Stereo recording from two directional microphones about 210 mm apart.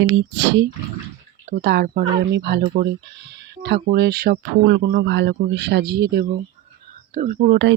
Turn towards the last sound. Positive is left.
turn(degrees=-55)  # may be behind; listen again after turning